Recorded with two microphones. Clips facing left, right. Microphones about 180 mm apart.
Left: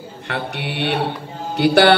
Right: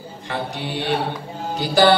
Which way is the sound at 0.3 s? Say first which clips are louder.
Left 1 dB; 65° left (ahead or behind).